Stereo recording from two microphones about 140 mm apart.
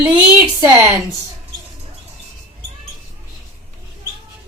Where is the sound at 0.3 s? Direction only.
20° right (ahead or behind).